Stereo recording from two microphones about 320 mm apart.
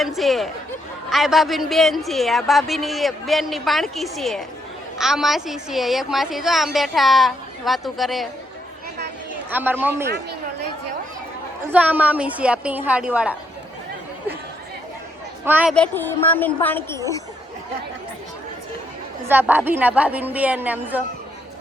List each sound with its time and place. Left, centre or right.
0.0 s speech: centre
9.5 s speech: centre
11.7 s speech: centre
15.4 s speech: centre
19.3 s speech: centre